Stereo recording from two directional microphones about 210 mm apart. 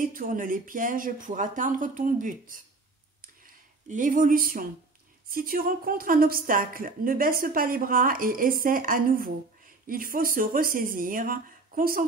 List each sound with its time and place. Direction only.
0.0 s speech: 40° right (ahead or behind)
3.2 s a sound: 40° right (ahead or behind)
5.3 s a woman's voice: 45° right (ahead or behind)